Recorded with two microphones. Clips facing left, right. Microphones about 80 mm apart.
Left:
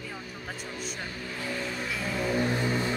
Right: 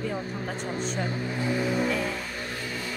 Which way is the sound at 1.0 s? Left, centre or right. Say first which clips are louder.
Right 7 dB; right.